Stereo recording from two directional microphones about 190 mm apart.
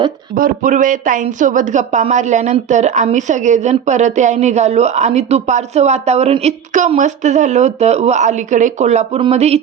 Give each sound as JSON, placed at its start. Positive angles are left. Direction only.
{"t": 0.3, "sound": "speech", "side_deg": -45}